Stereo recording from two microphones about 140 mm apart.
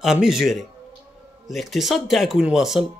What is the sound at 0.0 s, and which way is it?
Speech, 5° right (ahead or behind).